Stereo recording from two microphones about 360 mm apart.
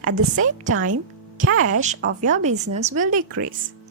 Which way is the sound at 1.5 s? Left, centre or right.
Right.